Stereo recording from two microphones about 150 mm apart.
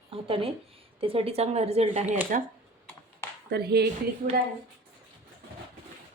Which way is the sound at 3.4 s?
90° right.